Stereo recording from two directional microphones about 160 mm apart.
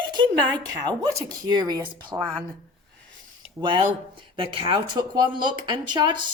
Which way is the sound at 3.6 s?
30° right (ahead or behind).